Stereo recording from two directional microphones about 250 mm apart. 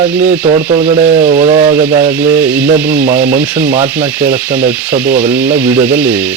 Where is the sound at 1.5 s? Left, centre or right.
Right.